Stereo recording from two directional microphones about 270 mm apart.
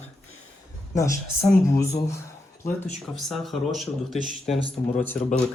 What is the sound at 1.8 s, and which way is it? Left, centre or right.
Speech, centre.